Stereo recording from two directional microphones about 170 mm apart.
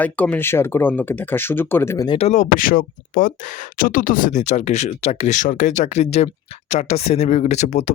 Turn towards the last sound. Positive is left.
turn(degrees=40)  # may be behind; listen again after turning